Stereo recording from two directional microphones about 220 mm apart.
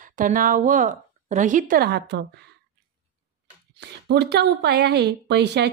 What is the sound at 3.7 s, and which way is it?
A woman's voice, 50° right (ahead or behind).